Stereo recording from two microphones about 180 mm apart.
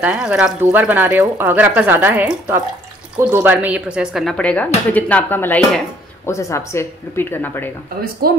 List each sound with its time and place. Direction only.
0.0 s a woman's voice: 5° right (ahead or behind); by 7.7 s 10° left (ahead or behind)
8.2 s speech: 55° right (ahead or behind)